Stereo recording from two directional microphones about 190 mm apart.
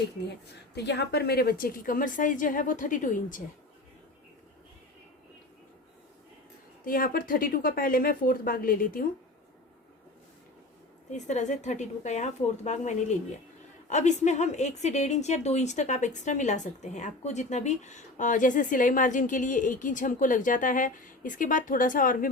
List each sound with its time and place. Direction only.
0.9 s a woman's voice: 60° left (ahead or behind); by 3.4 s 45° left (ahead or behind)
6.8 s a woman's voice: 50° left (ahead or behind)
11.1 s a woman's voice: 40° left (ahead or behind)